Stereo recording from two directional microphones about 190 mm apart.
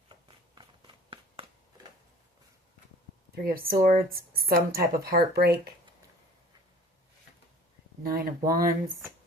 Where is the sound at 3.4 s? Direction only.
50° right (ahead or behind).